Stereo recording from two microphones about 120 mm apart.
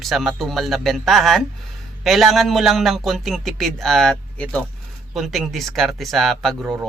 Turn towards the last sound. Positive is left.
turn(degrees=0)  # may be behind; listen again after turning